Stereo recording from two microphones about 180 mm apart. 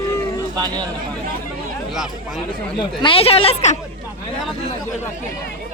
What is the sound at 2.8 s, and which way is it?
Speech, 30° left (ahead or behind).